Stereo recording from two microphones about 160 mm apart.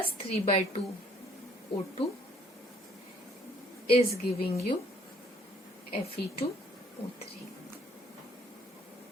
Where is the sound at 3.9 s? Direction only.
40° left (ahead or behind).